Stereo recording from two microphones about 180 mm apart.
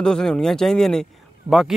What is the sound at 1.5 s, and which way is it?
Speech, 30° right (ahead or behind).